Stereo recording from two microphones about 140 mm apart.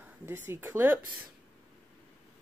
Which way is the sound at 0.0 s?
15° right (ahead or behind).